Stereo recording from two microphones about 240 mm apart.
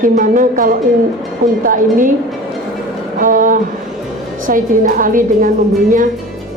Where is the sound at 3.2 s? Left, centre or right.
Right.